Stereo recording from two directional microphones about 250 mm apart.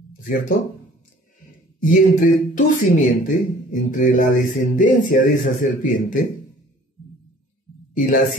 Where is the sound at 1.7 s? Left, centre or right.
Left.